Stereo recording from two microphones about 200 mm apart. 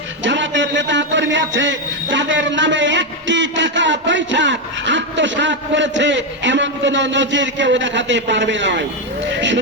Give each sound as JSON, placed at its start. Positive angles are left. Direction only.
{"t": 0.2, "sound": "a man's voice", "side_deg": -65}